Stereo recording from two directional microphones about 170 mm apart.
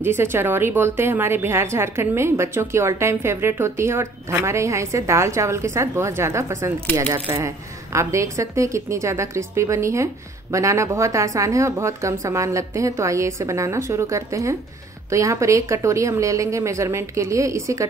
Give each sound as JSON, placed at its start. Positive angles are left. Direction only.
{"t": 0.0, "sound": "speech", "side_deg": -15}